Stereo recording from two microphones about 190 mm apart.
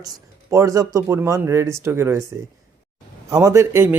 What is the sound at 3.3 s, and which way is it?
Speech, 15° right (ahead or behind).